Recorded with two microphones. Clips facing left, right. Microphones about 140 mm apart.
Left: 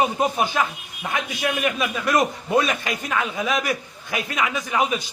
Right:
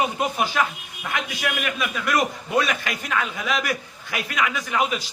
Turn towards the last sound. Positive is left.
turn(degrees=20)  # may be behind; listen again after turning